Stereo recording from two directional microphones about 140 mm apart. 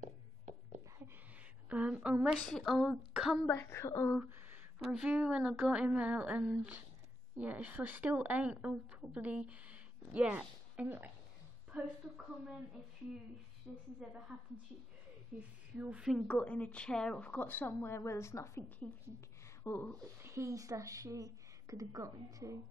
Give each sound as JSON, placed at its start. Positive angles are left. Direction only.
{"t": 1.7, "sound": "a sound", "side_deg": -5}
{"t": 2.4, "sound": "speech", "side_deg": 0}
{"t": 3.4, "sound": "a woman's voice", "side_deg": 15}
{"t": 4.2, "sound": "a woman's voice", "side_deg": -10}
{"t": 13.9, "sound": "a woman's voice", "side_deg": -5}
{"t": 20.2, "sound": "a woman's voice", "side_deg": -20}